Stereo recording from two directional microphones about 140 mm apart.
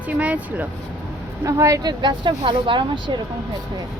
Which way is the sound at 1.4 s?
20° right (ahead or behind).